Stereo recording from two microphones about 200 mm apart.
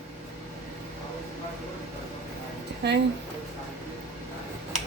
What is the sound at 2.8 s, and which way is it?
Speech, 55° right (ahead or behind).